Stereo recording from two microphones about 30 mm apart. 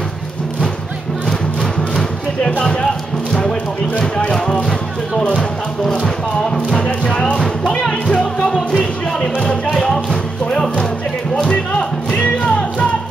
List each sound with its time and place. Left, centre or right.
1.6 s music: centre
8.1 s music: left
9.7 s music: centre
12.2 s music: left